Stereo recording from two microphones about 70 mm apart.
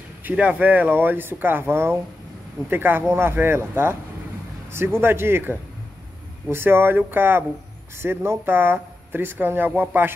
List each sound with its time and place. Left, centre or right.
0.2 s speech: right